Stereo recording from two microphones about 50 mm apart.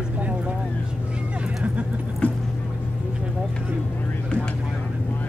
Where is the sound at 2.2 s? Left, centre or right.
Left.